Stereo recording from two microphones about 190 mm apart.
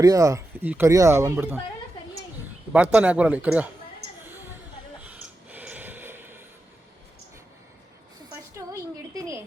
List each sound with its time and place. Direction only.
0.0 s speech: 20° right (ahead or behind)
2.7 s speech: 5° right (ahead or behind)
5.5 s snort: 10° right (ahead or behind)
8.5 s a sound: 15° right (ahead or behind)